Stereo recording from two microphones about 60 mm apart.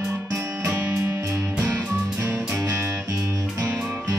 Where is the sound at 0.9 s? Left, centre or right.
Right.